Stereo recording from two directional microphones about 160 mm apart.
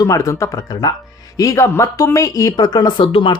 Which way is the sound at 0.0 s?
20° left (ahead or behind).